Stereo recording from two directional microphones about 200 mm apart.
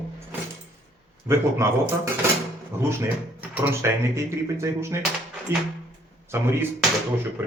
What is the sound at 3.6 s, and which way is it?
Speech, 15° right (ahead or behind).